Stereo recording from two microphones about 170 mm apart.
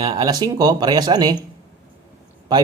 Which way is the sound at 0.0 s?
25° right (ahead or behind).